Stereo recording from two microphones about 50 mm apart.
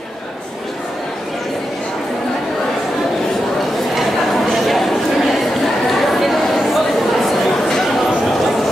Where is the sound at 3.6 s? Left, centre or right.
Centre.